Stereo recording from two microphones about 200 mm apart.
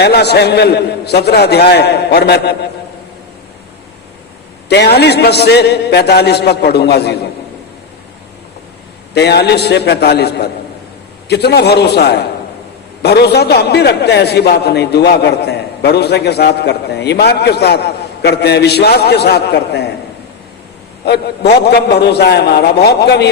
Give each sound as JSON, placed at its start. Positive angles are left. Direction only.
{"t": 0.0, "sound": "a man's voice", "side_deg": 55}
{"t": 4.7, "sound": "a man's voice", "side_deg": 55}
{"t": 9.1, "sound": "a man's voice", "side_deg": 55}
{"t": 21.0, "sound": "a man's voice", "side_deg": 55}